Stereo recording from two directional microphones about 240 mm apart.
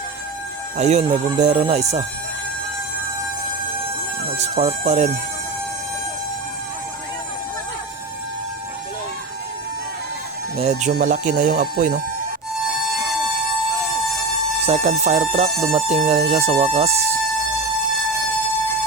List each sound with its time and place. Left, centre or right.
0.8 s speech: right
4.4 s speech: right
10.6 s speech: right
14.7 s speech: right